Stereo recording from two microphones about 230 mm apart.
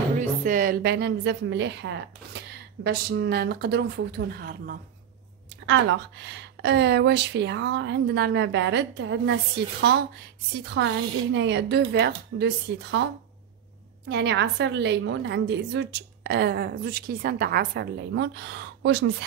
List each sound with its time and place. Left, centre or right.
0.2 s a woman's voice: right